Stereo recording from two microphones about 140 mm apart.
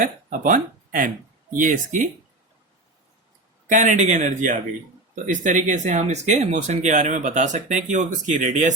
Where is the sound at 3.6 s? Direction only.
60° right (ahead or behind).